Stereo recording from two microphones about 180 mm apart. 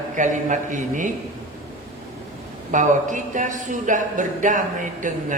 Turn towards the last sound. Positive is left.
turn(degrees=-45)  # may be behind; listen again after turning